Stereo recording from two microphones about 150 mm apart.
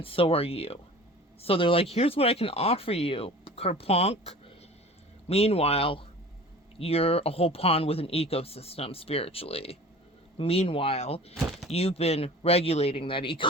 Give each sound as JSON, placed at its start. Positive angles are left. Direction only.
{"t": 0.0, "sound": "speech", "side_deg": 40}
{"t": 11.3, "sound": "speech", "side_deg": 0}
{"t": 11.7, "sound": "speech", "side_deg": 40}